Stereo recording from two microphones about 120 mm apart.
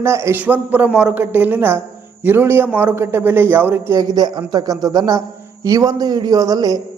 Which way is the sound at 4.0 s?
35° right (ahead or behind).